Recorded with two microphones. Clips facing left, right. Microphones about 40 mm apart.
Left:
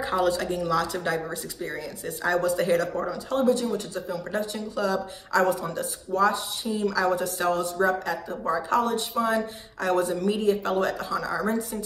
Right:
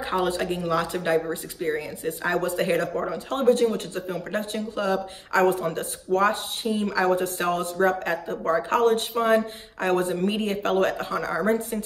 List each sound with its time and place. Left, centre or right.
0.0 s speech: right